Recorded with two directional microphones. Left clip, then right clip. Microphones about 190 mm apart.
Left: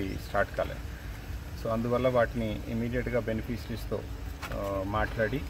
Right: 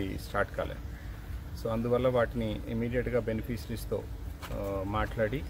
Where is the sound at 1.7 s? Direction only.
25° right (ahead or behind).